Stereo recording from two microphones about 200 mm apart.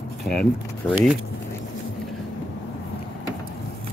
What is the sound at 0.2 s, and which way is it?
Speech, 5° left (ahead or behind).